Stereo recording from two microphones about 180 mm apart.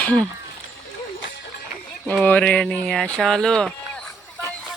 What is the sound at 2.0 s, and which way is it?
Speech, 10° left (ahead or behind).